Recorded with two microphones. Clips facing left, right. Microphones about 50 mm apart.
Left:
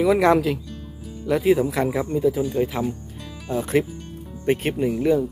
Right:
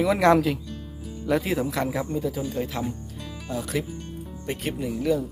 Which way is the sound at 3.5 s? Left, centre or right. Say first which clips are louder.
Left 7 dB; left.